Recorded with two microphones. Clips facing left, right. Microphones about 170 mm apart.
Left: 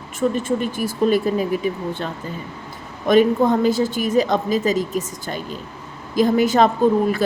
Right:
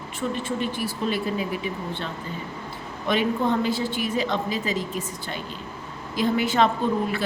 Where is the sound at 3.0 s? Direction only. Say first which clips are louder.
Left 8 dB; 45° left (ahead or behind).